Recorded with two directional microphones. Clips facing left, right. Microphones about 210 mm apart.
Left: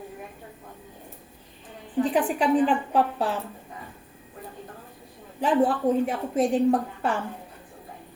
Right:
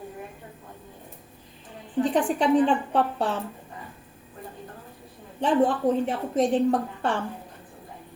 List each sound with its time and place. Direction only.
2.1 s a woman's voice: 5° left (ahead or behind)
5.4 s a woman's voice: 5° left (ahead or behind)